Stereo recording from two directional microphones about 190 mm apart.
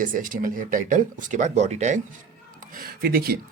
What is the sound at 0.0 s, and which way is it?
Speech, 45° right (ahead or behind).